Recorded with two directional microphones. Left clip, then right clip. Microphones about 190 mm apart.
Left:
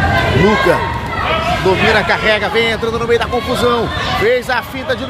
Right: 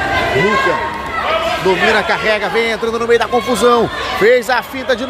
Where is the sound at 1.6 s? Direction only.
5° left (ahead or behind).